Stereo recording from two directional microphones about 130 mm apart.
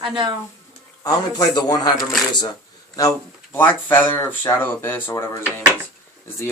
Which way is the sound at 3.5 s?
15° left (ahead or behind).